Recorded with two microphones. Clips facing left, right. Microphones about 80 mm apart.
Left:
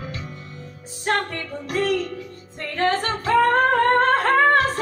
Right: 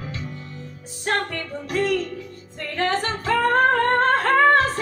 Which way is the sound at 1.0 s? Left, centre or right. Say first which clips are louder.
Left 1 dB; left.